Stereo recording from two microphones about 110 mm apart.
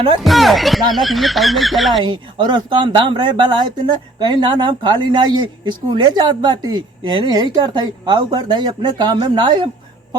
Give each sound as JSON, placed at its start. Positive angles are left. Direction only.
{"t": 0.2, "sound": "speech", "side_deg": 0}
{"t": 2.0, "sound": "speech", "side_deg": -45}